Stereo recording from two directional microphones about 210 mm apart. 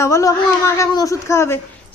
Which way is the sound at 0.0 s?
15° left (ahead or behind).